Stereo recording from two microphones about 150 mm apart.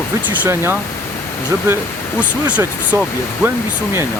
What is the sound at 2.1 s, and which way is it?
Speech, 10° right (ahead or behind).